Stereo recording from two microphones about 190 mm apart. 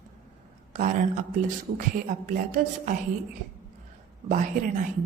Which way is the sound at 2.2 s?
45° right (ahead or behind).